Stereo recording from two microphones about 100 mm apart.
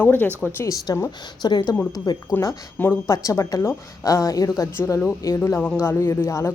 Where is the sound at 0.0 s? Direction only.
15° left (ahead or behind).